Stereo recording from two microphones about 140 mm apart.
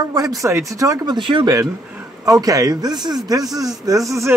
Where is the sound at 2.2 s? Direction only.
25° right (ahead or behind).